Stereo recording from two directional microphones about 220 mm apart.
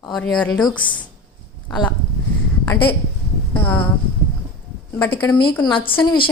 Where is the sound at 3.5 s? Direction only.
10° left (ahead or behind).